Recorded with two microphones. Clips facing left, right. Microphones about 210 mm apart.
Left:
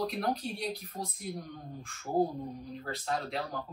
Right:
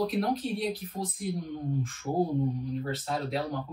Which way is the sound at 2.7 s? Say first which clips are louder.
Right 4 dB; centre (ahead or behind).